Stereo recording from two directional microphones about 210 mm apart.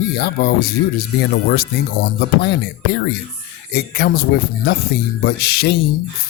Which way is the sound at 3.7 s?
50° left (ahead or behind).